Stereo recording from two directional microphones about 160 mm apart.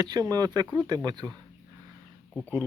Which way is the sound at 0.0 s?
25° right (ahead or behind).